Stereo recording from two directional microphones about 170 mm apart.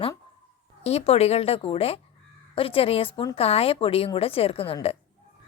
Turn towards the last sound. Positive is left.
turn(degrees=35)  # may be behind; listen again after turning